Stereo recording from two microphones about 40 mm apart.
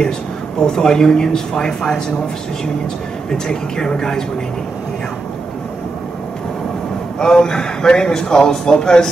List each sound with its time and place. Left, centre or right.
0.6 s speech: centre
3.3 s speech: centre
7.2 s speech: centre